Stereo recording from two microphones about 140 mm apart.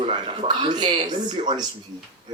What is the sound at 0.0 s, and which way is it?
Speech, 35° right (ahead or behind).